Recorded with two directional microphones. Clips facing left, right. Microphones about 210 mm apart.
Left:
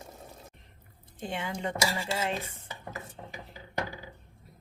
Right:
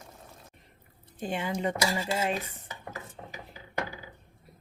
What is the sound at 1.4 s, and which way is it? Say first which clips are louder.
Dishes: right 2 dB; 20° right (ahead or behind).